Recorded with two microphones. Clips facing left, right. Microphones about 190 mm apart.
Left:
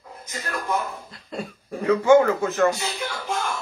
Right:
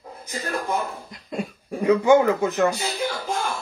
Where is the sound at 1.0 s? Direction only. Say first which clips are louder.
Right 3 dB; 15° right (ahead or behind).